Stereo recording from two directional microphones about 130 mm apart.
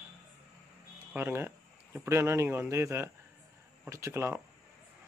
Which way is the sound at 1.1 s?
15° right (ahead or behind).